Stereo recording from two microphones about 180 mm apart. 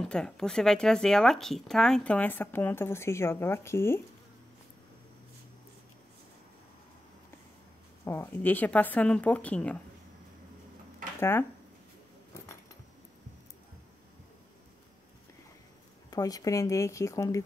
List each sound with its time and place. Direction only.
0.1 s speech: 5° left (ahead or behind)
8.0 s speech: 10° left (ahead or behind)
11.1 s speech: 15° left (ahead or behind)
16.1 s speech: 20° left (ahead or behind)